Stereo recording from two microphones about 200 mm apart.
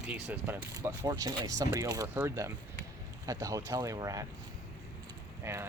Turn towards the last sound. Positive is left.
turn(degrees=-15)  # may be behind; listen again after turning